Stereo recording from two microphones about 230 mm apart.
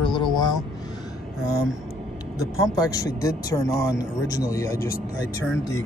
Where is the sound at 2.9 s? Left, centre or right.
Centre.